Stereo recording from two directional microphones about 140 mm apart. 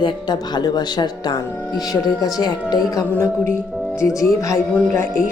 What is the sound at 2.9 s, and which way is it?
Speech, 15° left (ahead or behind).